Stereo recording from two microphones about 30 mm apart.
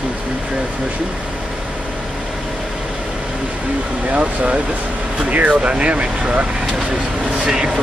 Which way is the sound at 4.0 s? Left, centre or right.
Right.